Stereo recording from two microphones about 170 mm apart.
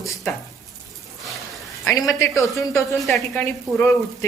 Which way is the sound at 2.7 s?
Centre (ahead or behind).